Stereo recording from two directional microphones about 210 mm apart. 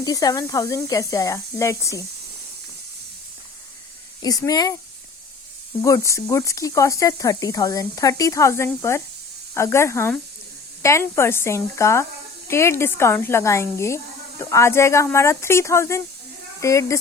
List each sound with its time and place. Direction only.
0.0 s a woman's voice: 15° left (ahead or behind)
4.2 s a woman's voice: 15° left (ahead or behind)
5.8 s a woman's voice: 15° left (ahead or behind)